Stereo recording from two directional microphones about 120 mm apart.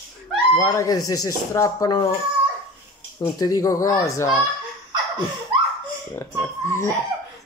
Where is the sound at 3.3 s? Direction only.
30° left (ahead or behind).